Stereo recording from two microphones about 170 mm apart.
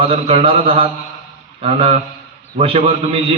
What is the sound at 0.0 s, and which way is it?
A man's voice, 35° right (ahead or behind).